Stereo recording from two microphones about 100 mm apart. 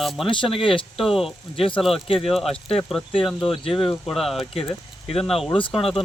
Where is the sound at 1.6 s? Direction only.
60° left (ahead or behind).